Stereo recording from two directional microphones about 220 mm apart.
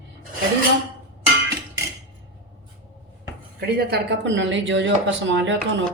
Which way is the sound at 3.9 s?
55° right (ahead or behind).